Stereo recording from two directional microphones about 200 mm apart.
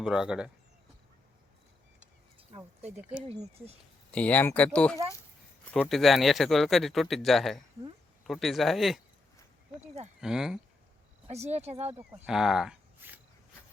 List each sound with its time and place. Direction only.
0.0 s speech: 5° right (ahead or behind)
3.0 s speech: 10° right (ahead or behind)
4.1 s speech: 5° left (ahead or behind)
10.2 s speech: 5° right (ahead or behind)
11.3 s speech: 35° right (ahead or behind)
11.9 s speech: 5° right (ahead or behind)